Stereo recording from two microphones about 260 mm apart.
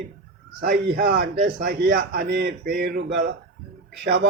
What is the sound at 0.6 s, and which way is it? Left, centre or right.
A man's voice, right.